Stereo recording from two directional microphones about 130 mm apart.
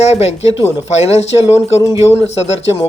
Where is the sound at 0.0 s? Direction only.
55° left (ahead or behind).